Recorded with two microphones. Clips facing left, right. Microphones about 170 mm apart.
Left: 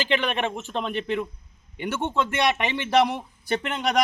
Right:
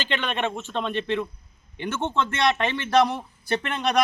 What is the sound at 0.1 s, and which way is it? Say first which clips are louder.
A man's voice: even; 10° left (ahead or behind).